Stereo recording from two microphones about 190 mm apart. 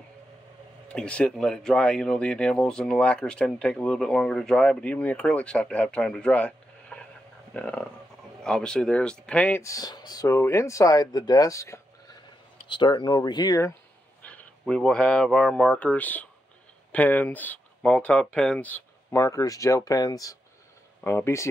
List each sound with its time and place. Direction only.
0.8 s speech: 5° left (ahead or behind)
14.2 s speech: 5° left (ahead or behind)